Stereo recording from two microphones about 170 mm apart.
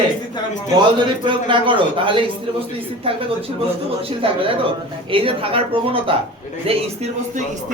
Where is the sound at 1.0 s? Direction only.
30° right (ahead or behind).